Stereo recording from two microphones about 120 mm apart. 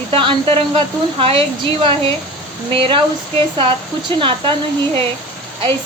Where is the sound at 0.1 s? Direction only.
45° right (ahead or behind).